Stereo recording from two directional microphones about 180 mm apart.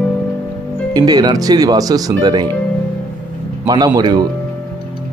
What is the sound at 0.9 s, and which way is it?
Speech, 20° right (ahead or behind).